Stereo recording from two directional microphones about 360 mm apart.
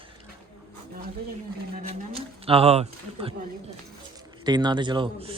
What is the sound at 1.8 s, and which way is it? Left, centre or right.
Speech, centre.